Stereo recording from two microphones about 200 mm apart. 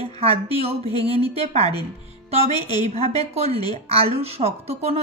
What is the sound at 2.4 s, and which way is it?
Speech, 20° left (ahead or behind).